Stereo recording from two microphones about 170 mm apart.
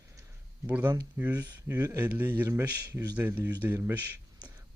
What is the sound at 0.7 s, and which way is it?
Speech, 10° right (ahead or behind).